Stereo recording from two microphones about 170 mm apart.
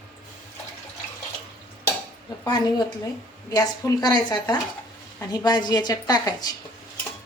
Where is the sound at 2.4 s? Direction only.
25° left (ahead or behind).